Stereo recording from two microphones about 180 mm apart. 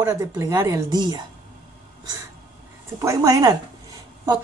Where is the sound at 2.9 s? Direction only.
20° right (ahead or behind).